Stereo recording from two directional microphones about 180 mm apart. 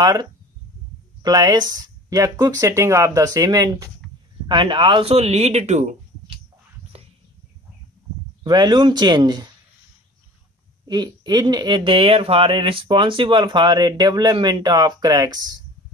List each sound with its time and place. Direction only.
0.0 s speech: 20° right (ahead or behind); by 5.9 s 40° right (ahead or behind)
8.5 s speech: 25° right (ahead or behind)
10.9 s speech: 20° right (ahead or behind)